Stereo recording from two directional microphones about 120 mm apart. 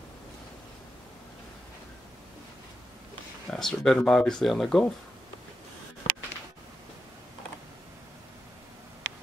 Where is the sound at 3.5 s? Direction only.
5° left (ahead or behind).